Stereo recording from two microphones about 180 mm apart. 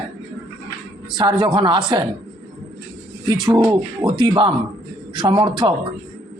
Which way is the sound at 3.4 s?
25° right (ahead or behind).